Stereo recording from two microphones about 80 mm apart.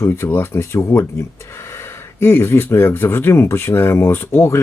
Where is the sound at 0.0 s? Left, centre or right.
Left.